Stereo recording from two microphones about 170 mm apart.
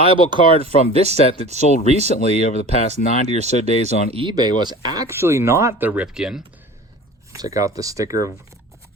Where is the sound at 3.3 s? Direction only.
40° right (ahead or behind).